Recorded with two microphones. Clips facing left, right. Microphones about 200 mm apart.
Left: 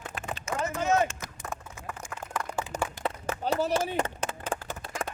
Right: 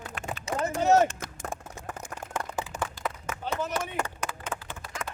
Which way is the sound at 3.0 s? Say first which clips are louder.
Left 3 dB; 35° left (ahead or behind).